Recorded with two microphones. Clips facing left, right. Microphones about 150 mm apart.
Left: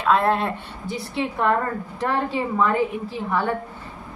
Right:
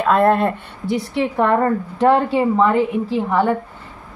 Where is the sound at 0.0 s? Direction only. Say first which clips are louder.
Right 5 dB; 50° right (ahead or behind).